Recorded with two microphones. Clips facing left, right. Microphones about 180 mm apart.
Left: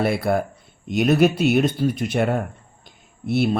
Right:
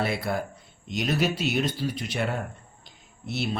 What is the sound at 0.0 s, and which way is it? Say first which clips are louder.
Speech: left 7 dB; 55° left (ahead or behind).